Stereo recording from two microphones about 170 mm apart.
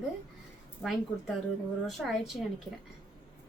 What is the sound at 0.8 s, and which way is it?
A woman's voice, centre (ahead or behind).